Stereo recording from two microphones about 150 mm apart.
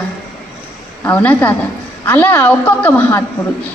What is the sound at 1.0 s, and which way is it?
A woman's voice, 15° left (ahead or behind).